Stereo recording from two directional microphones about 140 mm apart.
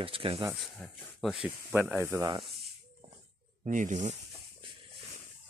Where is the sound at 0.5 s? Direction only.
Centre (ahead or behind).